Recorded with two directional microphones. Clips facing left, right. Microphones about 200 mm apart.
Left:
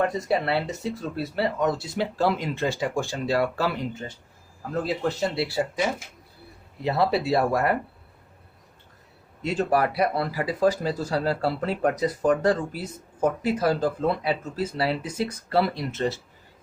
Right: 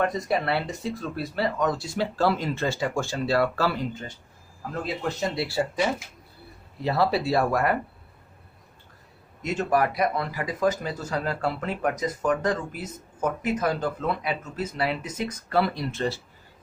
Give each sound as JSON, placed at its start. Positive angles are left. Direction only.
{"t": 0.0, "sound": "speech", "side_deg": 25}
{"t": 4.7, "sound": "speech", "side_deg": 30}
{"t": 6.8, "sound": "speech", "side_deg": 20}
{"t": 9.4, "sound": "speech", "side_deg": 30}